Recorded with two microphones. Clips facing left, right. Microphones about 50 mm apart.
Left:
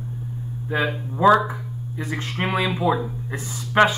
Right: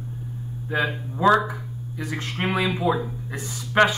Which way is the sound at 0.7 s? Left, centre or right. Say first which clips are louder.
Left 1 dB; centre.